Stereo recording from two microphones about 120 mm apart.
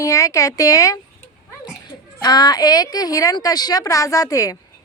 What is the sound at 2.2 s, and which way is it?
A woman's voice, 35° left (ahead or behind).